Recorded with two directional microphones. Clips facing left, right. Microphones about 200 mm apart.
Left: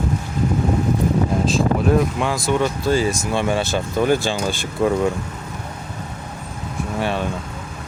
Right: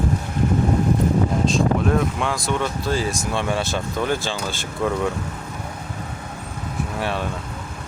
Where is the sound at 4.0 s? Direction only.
15° left (ahead or behind).